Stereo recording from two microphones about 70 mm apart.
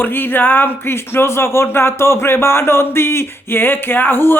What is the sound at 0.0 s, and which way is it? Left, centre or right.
Speech, left.